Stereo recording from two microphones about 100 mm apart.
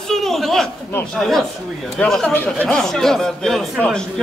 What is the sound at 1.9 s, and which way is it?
Speech, 10° left (ahead or behind).